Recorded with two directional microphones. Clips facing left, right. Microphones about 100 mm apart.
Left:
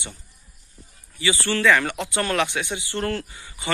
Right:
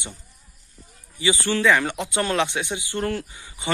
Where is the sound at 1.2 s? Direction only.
20° right (ahead or behind).